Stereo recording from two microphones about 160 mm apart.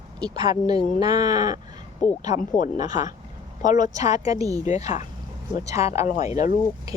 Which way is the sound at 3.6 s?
50° left (ahead or behind).